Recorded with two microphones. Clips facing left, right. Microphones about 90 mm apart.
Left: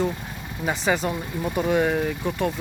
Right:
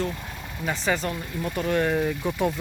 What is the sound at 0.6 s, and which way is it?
Speech, 15° left (ahead or behind).